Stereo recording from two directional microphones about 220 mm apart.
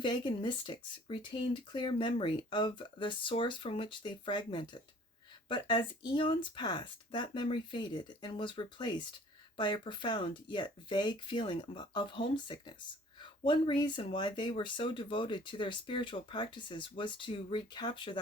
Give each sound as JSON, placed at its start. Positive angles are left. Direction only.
{"t": 0.0, "sound": "speech", "side_deg": 20}